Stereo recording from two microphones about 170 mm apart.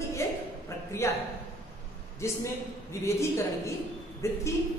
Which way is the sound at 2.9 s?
15° left (ahead or behind).